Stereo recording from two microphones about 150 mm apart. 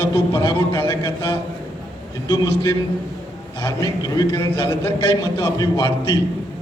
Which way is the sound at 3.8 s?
25° left (ahead or behind).